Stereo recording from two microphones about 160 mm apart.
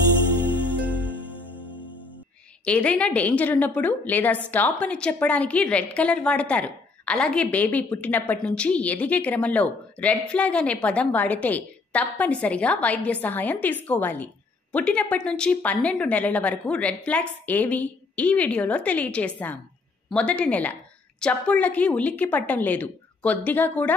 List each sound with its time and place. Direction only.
2.6 s a woman's voice: 10° left (ahead or behind)